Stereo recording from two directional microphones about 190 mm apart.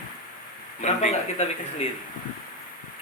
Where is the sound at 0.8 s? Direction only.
35° left (ahead or behind).